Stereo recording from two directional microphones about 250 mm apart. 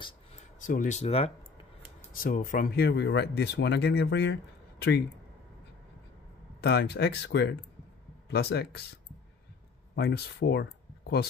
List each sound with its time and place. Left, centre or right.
0.0 s speech: left
6.6 s speech: left
9.9 s speech: left